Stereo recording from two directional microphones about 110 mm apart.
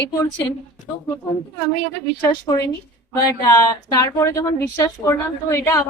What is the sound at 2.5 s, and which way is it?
Speech, 30° left (ahead or behind).